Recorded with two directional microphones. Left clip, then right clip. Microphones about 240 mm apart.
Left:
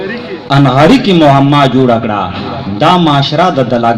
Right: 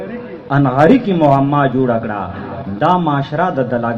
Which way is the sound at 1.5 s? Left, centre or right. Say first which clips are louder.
Left 6 dB; left.